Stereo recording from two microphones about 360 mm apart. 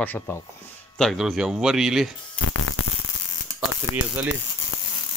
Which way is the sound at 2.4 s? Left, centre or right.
Left.